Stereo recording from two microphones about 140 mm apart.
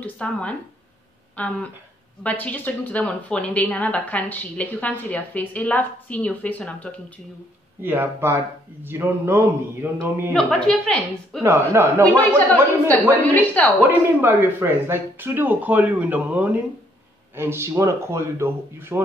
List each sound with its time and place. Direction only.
0.0 s a woman's voice: 10° left (ahead or behind)
7.8 s speech: 15° right (ahead or behind)
10.3 s a woman's voice: 5° left (ahead or behind)
11.4 s speech: 15° right (ahead or behind)
13.2 s a woman's voice: 10° left (ahead or behind)
13.7 s a man's voice: 15° right (ahead or behind)